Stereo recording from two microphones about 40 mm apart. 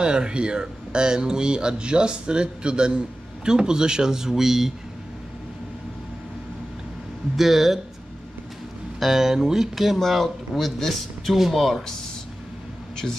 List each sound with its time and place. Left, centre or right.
0.0 s speech: right; by 4.7 s centre
7.3 s speech: centre
9.0 s speech: centre
9.9 s speech: centre